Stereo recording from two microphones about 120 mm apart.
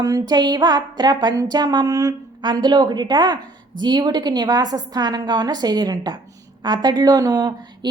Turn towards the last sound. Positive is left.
turn(degrees=-35)  # may be behind; listen again after turning